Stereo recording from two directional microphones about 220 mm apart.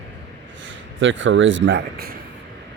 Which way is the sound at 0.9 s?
60° right (ahead or behind).